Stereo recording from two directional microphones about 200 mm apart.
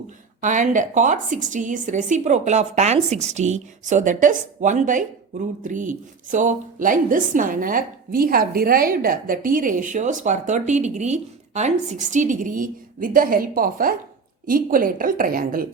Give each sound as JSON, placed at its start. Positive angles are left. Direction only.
{"t": 0.4, "sound": "a woman's voice", "side_deg": -40}